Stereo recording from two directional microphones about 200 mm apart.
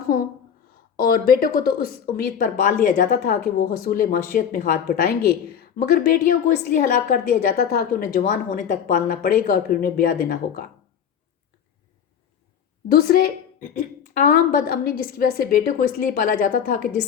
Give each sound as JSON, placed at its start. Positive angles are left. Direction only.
{"t": 0.9, "sound": "a woman's voice", "side_deg": 50}
{"t": 12.9, "sound": "a woman's voice", "side_deg": 50}